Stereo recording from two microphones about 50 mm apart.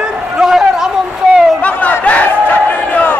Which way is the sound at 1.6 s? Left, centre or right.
Left.